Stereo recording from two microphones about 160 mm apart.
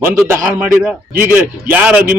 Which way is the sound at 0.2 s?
15° right (ahead or behind).